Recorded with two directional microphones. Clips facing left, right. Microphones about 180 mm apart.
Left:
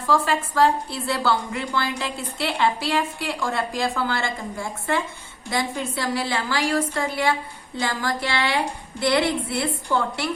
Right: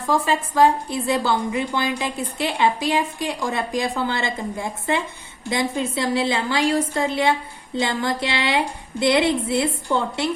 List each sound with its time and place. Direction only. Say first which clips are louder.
0.0 s a woman's voice: right 1 dB; 20° right (ahead or behind)